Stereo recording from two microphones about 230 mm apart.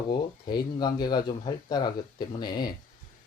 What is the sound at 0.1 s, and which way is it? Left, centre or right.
Speech, centre.